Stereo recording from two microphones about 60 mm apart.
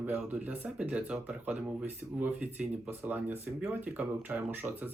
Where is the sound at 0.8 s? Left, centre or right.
Right.